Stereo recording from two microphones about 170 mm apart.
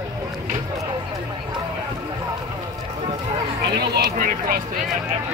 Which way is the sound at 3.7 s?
70° right (ahead or behind).